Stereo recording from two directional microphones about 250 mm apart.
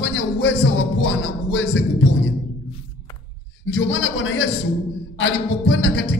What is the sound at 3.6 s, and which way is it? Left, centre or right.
Speech, left.